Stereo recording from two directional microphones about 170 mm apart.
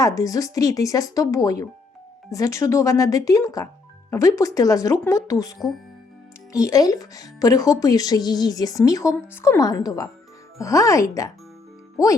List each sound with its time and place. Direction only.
0.0 s a woman's voice: 20° left (ahead or behind)